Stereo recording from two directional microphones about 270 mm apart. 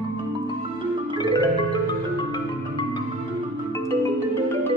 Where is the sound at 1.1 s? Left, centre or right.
Centre.